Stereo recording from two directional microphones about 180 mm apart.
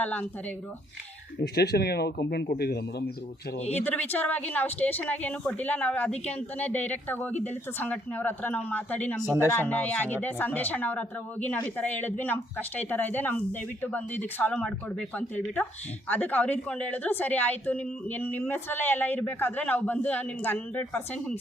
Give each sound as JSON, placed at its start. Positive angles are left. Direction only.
{"t": 0.0, "sound": "speech", "side_deg": 10}
{"t": 1.4, "sound": "speech", "side_deg": 60}
{"t": 3.7, "sound": "speech", "side_deg": 10}